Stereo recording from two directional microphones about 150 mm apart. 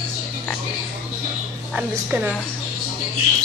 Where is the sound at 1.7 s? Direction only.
5° right (ahead or behind).